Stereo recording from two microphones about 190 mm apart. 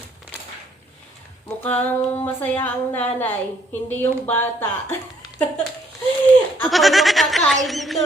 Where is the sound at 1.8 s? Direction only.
10° left (ahead or behind).